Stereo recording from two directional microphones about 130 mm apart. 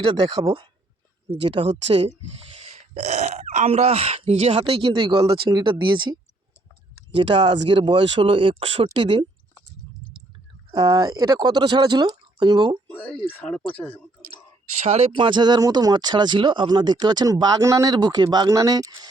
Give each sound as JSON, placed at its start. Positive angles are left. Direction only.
{"t": 0.0, "sound": "speech", "side_deg": -40}
{"t": 5.2, "sound": "speech", "side_deg": -25}
{"t": 7.2, "sound": "speech", "side_deg": -35}
{"t": 10.7, "sound": "speech", "side_deg": -35}
{"t": 12.9, "sound": "speech", "side_deg": 15}
{"t": 14.8, "sound": "speech", "side_deg": -55}
{"t": 15.1, "sound": "speech", "side_deg": -40}